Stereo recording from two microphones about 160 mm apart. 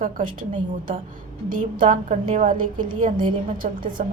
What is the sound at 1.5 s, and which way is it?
A woman's voice, 55° right (ahead or behind).